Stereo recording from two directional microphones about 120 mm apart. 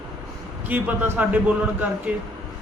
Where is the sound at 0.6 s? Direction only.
15° right (ahead or behind).